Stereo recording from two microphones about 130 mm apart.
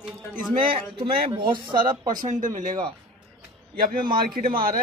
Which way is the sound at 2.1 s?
75° right (ahead or behind).